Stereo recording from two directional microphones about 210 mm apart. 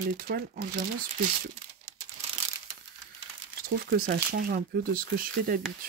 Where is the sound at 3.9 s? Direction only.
45° right (ahead or behind).